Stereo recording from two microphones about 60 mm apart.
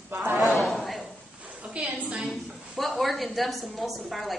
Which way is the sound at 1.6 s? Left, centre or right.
Centre.